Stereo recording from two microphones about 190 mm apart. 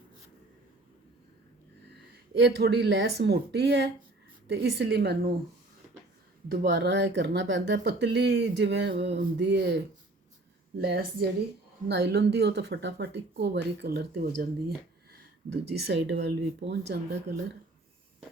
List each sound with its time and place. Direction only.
2.3 s speech: 65° right (ahead or behind)
6.5 s speech: 60° right (ahead or behind)
15.4 s speech: 60° right (ahead or behind)